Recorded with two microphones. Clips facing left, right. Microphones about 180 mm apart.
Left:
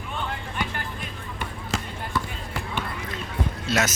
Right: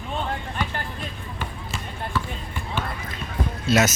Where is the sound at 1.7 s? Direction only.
90° left.